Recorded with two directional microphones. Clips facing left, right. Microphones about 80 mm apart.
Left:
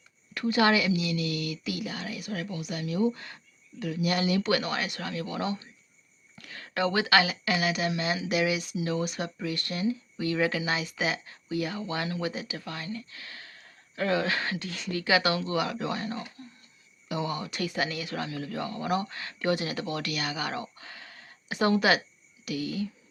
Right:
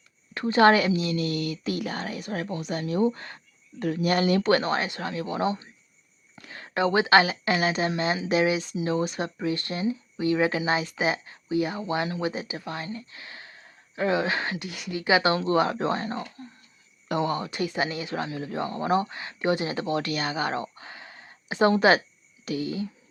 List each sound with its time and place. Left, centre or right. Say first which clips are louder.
0.3 s a woman's voice: right 5 dB; right
17.1 s speech: right 5 dB; right
17.4 s speech: right 3 dB; right